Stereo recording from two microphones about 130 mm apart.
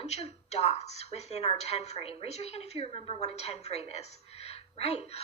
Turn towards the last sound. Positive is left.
turn(degrees=55)  # may be behind; listen again after turning